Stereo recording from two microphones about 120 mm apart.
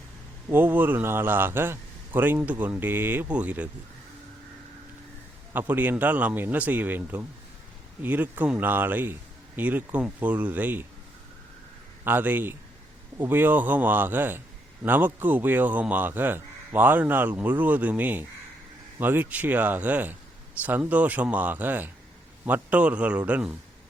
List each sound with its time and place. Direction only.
0.5 s speech: 15° right (ahead or behind)
5.5 s speech: 15° right (ahead or behind)
12.0 s speech: 15° right (ahead or behind)